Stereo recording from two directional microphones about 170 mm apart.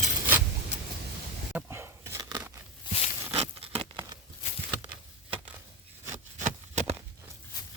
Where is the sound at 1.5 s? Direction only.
15° right (ahead or behind).